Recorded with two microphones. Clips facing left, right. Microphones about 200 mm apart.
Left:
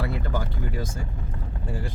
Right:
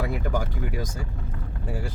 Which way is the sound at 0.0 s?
15° right (ahead or behind).